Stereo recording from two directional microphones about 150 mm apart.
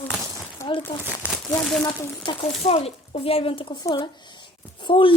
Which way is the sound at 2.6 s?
40° left (ahead or behind).